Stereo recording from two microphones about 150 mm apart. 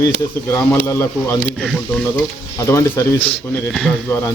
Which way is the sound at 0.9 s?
15° left (ahead or behind).